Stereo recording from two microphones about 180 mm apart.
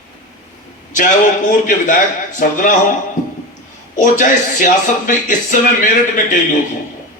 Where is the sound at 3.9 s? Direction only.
45° left (ahead or behind).